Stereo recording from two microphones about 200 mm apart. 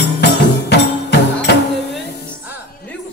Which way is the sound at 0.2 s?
55° left (ahead or behind).